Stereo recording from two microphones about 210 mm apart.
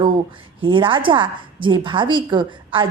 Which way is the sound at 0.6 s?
25° right (ahead or behind).